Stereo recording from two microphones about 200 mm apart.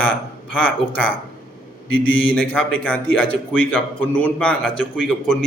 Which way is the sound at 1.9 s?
75° left (ahead or behind).